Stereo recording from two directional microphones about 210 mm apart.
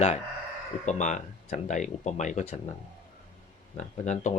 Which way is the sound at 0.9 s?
35° left (ahead or behind).